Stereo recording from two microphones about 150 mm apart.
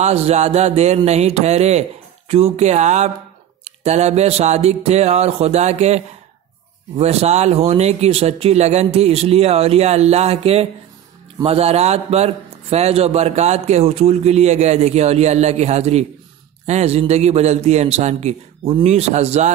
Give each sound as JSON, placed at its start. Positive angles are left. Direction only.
{"t": 0.0, "sound": "a man's voice", "side_deg": -45}
{"t": 7.0, "sound": "a man's voice", "side_deg": -45}